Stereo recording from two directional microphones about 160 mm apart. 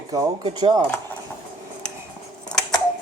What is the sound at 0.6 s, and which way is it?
Speech, 30° right (ahead or behind).